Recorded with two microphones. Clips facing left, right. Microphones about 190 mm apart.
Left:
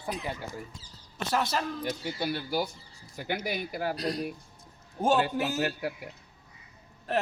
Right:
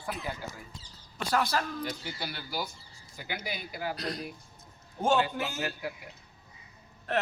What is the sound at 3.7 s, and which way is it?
A man's voice, 45° left (ahead or behind).